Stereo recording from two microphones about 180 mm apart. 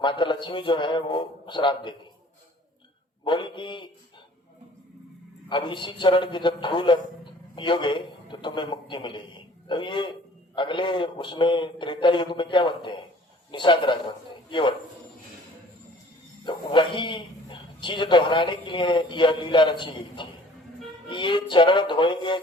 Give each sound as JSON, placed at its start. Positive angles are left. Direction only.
{"t": 0.0, "sound": "a man's voice", "side_deg": 25}
{"t": 3.2, "sound": "a man's voice", "side_deg": 25}
{"t": 5.5, "sound": "a man's voice", "side_deg": 25}
{"t": 16.4, "sound": "a man's voice", "side_deg": 25}